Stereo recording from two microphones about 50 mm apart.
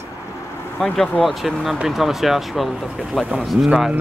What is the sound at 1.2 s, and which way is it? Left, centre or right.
Speech, centre.